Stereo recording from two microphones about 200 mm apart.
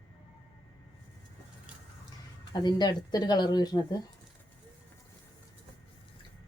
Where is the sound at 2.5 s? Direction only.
20° left (ahead or behind).